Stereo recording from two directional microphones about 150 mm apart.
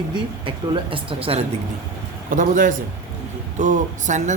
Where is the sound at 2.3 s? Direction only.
65° right (ahead or behind).